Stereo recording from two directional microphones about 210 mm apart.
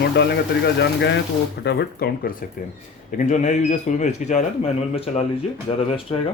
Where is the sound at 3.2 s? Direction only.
35° left (ahead or behind).